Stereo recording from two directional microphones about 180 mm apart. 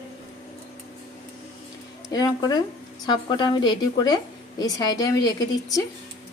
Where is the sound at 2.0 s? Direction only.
20° left (ahead or behind).